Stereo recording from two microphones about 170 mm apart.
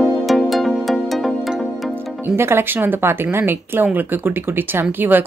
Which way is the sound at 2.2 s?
15° right (ahead or behind).